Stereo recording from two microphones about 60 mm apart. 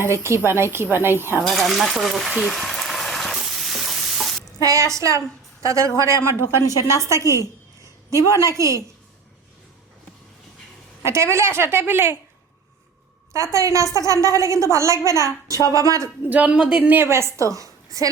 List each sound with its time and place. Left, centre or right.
0.0 s a woman's voice: right
1.5 s speech: centre
2.4 s a sound: centre
3.3 s stir: centre
4.6 s a woman's voice: right
6.6 s a woman's voice: left
7.0 s a woman's voice: right
11.0 s a woman's voice: right
13.3 s a woman's voice: right
16.3 s speech: right
17.1 s a woman's voice: right